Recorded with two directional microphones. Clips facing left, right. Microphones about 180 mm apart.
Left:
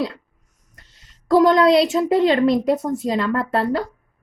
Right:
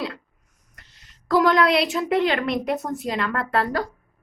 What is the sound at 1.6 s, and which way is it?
Speech, 35° left (ahead or behind).